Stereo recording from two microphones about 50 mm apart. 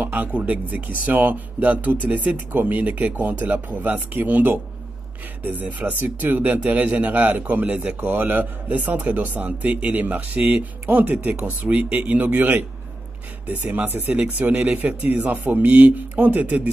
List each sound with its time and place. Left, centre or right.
0.0 s speech: right